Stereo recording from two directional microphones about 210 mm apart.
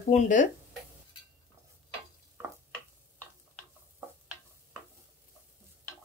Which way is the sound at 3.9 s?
5° right (ahead or behind).